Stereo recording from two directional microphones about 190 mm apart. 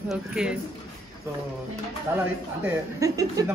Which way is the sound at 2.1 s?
15° right (ahead or behind).